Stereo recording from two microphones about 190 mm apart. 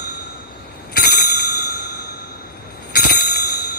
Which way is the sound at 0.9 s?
55° left (ahead or behind).